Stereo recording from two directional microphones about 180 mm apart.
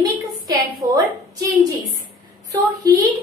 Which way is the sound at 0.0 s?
20° right (ahead or behind).